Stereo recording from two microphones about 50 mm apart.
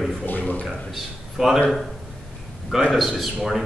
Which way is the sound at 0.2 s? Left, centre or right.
Left.